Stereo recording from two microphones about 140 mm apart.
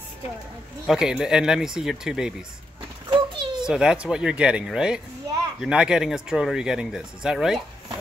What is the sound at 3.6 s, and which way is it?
Speech, 5° right (ahead or behind).